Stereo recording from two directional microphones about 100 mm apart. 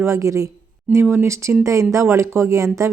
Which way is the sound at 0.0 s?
30° right (ahead or behind).